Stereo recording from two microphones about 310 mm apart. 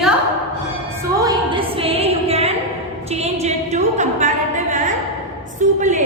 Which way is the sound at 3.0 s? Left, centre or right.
Right.